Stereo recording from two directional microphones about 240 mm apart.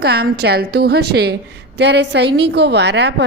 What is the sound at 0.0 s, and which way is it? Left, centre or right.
A woman's voice, right.